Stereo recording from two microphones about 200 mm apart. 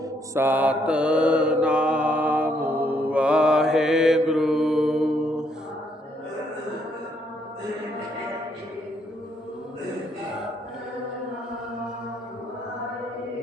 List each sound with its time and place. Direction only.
0.3 s mantra: 10° right (ahead or behind)